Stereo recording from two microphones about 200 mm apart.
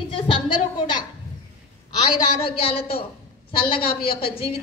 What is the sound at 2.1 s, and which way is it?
A woman's voice, 25° left (ahead or behind).